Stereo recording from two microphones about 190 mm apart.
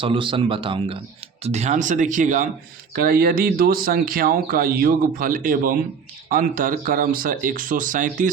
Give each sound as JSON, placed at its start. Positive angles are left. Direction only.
{"t": 0.0, "sound": "speech", "side_deg": -25}